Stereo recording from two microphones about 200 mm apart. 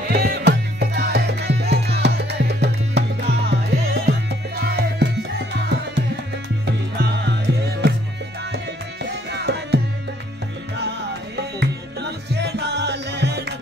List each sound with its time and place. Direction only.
0.1 s music: 50° right (ahead or behind)
6.6 s music: 55° right (ahead or behind)
9.3 s music: 55° right (ahead or behind)
10.8 s music: 55° right (ahead or behind)